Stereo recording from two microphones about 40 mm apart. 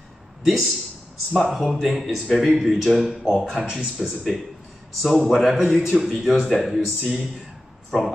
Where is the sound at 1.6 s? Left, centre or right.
Centre.